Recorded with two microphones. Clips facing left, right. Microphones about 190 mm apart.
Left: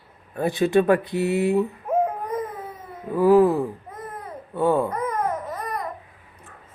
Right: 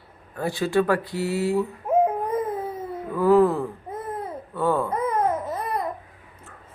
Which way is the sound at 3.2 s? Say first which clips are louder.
Left 2 dB; 15° left (ahead or behind).